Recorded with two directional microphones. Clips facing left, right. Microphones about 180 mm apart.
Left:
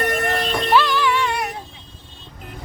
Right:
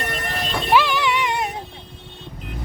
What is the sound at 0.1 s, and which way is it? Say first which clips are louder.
Music: left 6 dB; 50° left (ahead or behind).